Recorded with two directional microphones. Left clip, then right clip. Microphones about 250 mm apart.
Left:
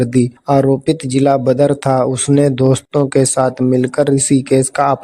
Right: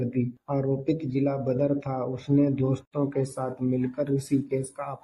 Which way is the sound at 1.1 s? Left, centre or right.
Left.